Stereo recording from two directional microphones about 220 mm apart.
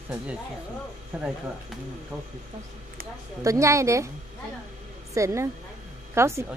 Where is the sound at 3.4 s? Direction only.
15° right (ahead or behind).